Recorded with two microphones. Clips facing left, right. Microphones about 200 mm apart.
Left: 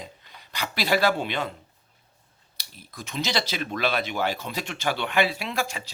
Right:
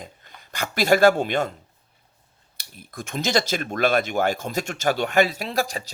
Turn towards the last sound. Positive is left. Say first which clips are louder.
# right 4 dB
turn(degrees=-40)  # may be behind; listen again after turning